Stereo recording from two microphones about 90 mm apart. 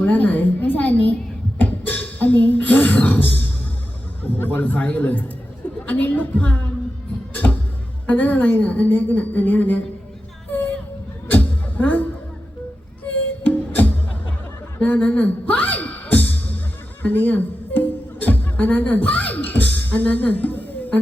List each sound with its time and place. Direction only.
0.0 s a woman's voice: 20° left (ahead or behind)
1.5 s a sound: 20° left (ahead or behind)
5.8 s a woman's voice: 20° left (ahead or behind)
8.0 s a woman's voice: 20° left (ahead or behind)
11.3 s music: 15° left (ahead or behind)
13.4 s music: 20° left (ahead or behind)